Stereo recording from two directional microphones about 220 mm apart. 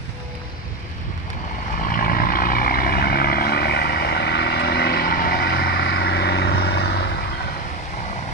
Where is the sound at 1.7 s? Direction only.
40° left (ahead or behind).